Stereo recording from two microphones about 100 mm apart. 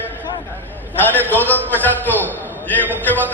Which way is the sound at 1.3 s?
20° left (ahead or behind).